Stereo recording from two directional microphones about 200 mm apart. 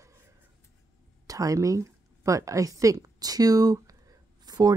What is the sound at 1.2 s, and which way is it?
A woman's voice, 15° right (ahead or behind).